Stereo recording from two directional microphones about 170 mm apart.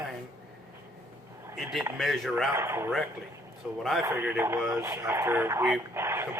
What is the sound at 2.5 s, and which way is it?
A man's voice, 15° right (ahead or behind).